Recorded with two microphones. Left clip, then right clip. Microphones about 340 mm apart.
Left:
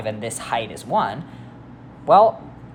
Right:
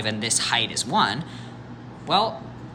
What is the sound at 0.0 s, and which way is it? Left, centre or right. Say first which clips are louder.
Speech: right 2 dB; centre.